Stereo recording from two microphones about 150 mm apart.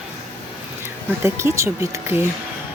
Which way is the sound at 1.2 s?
15° right (ahead or behind).